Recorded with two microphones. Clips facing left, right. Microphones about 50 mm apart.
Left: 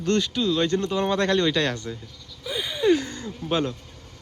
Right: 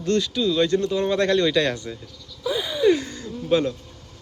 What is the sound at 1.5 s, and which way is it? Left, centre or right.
Speech, centre.